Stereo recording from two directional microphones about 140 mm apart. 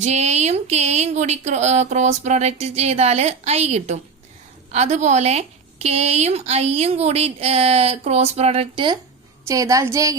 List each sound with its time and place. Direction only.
0.0 s a woman's voice: 55° right (ahead or behind); by 9.0 s 35° right (ahead or behind)
9.5 s a woman's voice: 25° right (ahead or behind)